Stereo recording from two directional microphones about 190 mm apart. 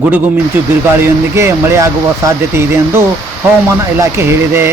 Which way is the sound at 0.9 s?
15° right (ahead or behind).